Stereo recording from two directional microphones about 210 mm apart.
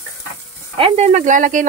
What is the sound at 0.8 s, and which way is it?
Speech, 35° right (ahead or behind).